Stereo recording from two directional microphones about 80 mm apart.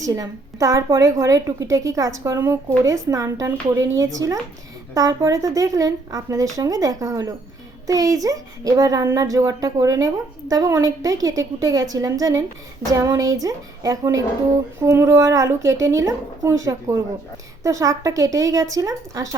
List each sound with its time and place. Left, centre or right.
0.0 s a woman's voice: right